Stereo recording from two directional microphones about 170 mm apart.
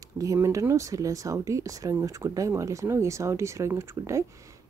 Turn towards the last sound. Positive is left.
turn(degrees=-15)  # may be behind; listen again after turning